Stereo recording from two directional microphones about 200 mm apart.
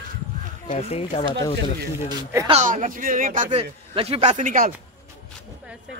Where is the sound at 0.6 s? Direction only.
30° left (ahead or behind).